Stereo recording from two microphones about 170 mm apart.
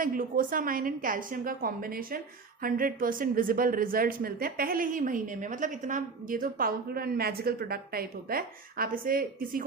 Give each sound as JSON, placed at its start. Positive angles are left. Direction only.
{"t": 0.0, "sound": "a woman's voice", "side_deg": -55}